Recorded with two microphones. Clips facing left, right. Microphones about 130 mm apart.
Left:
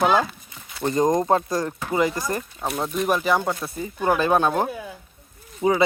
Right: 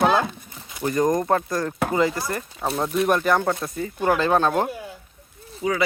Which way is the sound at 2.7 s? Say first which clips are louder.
Right 2 dB; centre (ahead or behind).